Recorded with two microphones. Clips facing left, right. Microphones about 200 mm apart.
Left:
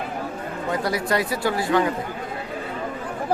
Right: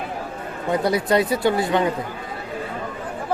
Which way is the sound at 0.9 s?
25° right (ahead or behind).